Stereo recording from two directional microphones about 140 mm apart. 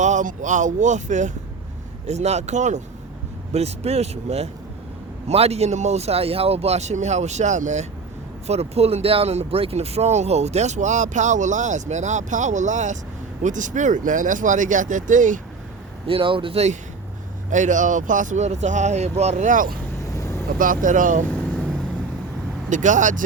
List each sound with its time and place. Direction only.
0.0 s speech: 60° right (ahead or behind)
16.0 s speech: 40° right (ahead or behind)
17.5 s speech: 65° right (ahead or behind); by 19.8 s 80° right
20.1 s vehicle: 20° left (ahead or behind)
20.8 s speech: 70° right (ahead or behind)
21.2 s vehicle: 10° left (ahead or behind)
22.7 s speech: 65° right (ahead or behind)